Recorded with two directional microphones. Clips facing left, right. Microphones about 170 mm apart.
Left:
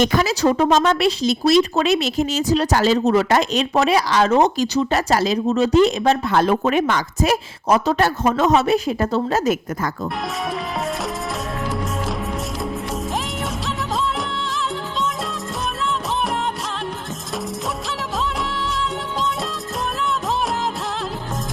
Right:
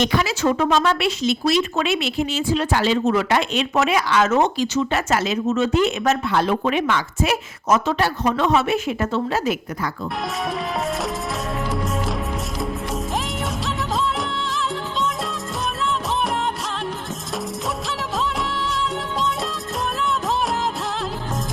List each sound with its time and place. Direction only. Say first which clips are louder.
0.0 s speech: left 3 dB; 45° left (ahead or behind)